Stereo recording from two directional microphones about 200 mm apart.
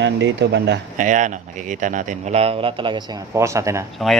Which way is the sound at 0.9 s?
40° right (ahead or behind).